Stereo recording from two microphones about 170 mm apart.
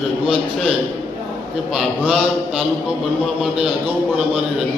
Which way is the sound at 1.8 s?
Centre (ahead or behind).